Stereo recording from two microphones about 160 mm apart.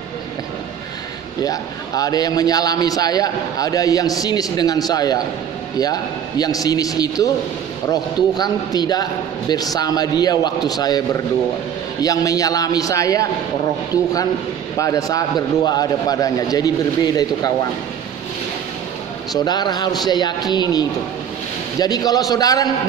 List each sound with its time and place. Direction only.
1.4 s a man's voice: 25° left (ahead or behind)
14.8 s a man's voice: 20° left (ahead or behind)
19.3 s a man's voice: 25° left (ahead or behind)